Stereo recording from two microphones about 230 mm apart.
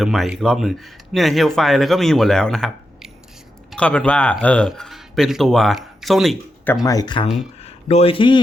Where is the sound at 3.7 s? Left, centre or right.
Centre.